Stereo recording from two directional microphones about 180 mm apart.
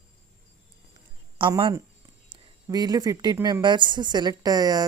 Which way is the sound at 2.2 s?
20° right (ahead or behind).